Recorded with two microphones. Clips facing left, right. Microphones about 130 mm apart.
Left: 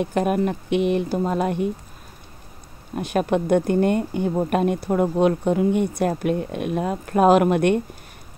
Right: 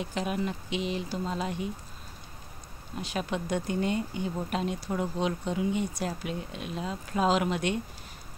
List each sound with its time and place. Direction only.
0.0 s speech: 55° left (ahead or behind)
3.0 s speech: 55° left (ahead or behind)